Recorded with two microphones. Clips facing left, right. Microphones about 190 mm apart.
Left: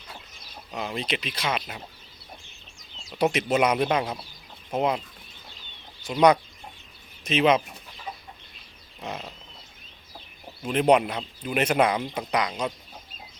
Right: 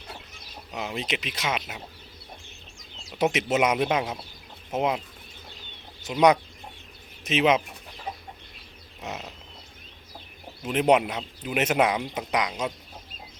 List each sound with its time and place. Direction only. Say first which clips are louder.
0.7 s speech: left 1 dB; 5° right (ahead or behind)
3.2 s speech: left 1 dB; 5° right (ahead or behind)
6.0 s speech: left 1 dB; 20° right (ahead or behind)
9.0 s wild animals: left 1 dB; 5° right (ahead or behind)
10.7 s speech: left 1 dB; 15° right (ahead or behind)